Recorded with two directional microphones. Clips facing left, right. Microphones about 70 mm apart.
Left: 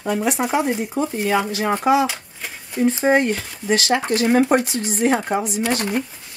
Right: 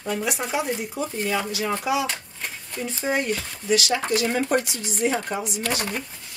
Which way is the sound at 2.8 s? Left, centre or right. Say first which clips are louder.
Left 9 dB; left.